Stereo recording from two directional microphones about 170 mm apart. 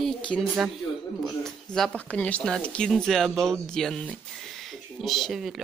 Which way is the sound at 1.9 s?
10° left (ahead or behind).